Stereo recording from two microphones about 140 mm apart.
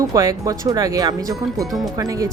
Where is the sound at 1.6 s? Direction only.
Centre (ahead or behind).